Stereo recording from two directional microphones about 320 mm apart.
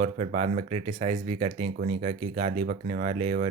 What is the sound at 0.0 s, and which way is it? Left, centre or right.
Speech, right.